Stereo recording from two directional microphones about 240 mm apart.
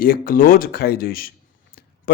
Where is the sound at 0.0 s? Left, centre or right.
Left.